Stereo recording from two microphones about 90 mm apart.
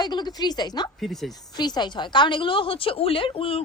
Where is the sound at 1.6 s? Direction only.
50° left (ahead or behind).